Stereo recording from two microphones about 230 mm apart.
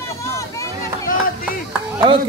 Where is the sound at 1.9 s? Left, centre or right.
Centre.